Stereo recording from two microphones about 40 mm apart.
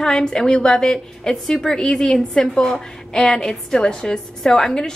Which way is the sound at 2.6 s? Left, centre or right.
Left.